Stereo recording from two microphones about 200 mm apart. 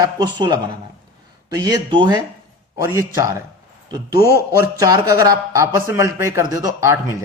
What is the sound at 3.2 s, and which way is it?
Speech, 15° right (ahead or behind).